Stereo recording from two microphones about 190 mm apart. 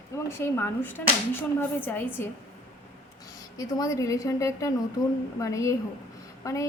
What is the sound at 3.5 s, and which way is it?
A woman's voice, 20° left (ahead or behind).